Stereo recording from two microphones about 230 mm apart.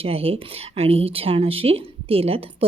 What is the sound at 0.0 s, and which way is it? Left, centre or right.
Speech, right.